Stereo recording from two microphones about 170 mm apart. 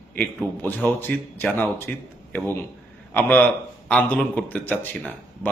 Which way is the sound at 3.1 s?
10° left (ahead or behind).